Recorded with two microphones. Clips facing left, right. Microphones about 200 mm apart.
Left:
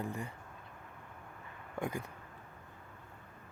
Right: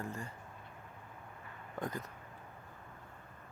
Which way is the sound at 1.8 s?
10° left (ahead or behind).